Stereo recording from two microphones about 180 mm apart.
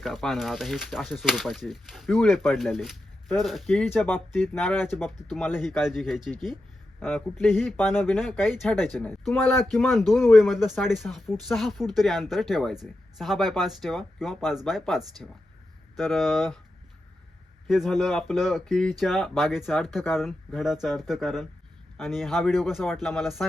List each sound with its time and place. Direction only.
0.0 s speech: centre (ahead or behind)
5.0 s speech: centre (ahead or behind)
7.9 s speech: 10° left (ahead or behind)
17.7 s speech: centre (ahead or behind)